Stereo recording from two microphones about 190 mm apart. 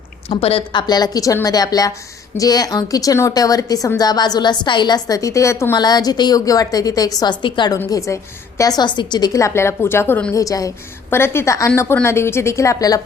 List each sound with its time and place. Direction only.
0.3 s a woman's voice: 30° left (ahead or behind)